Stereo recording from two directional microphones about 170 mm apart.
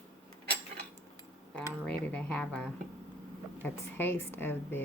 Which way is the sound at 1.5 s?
10° left (ahead or behind).